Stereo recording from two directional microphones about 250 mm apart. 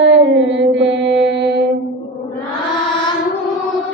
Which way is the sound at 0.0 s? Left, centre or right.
Right.